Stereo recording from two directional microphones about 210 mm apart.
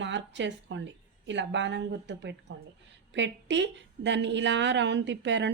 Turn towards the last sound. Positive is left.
turn(degrees=-55)  # may be behind; listen again after turning